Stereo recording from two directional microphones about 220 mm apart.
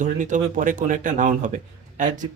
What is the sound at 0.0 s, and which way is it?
Speech, 35° right (ahead or behind).